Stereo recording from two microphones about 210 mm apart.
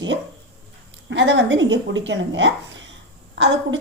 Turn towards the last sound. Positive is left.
turn(degrees=-60)  # may be behind; listen again after turning